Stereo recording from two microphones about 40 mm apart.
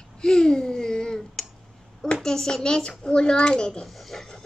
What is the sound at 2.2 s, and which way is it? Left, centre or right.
A child's voice, centre.